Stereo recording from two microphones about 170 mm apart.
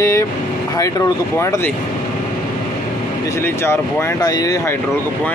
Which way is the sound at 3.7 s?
20° left (ahead or behind).